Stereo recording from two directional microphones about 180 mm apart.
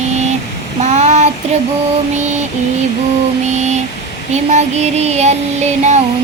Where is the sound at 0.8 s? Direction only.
40° right (ahead or behind).